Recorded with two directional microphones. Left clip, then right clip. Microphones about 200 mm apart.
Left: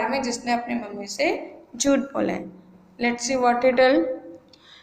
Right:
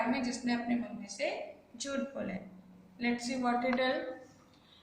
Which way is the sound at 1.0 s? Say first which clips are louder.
Left 15 dB; 45° left (ahead or behind).